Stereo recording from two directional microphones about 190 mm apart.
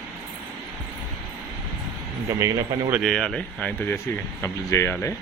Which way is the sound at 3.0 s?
Centre (ahead or behind).